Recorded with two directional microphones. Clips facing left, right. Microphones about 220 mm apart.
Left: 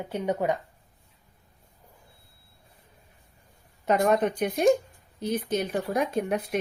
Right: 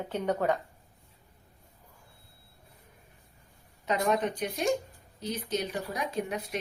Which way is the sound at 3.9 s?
50° left (ahead or behind).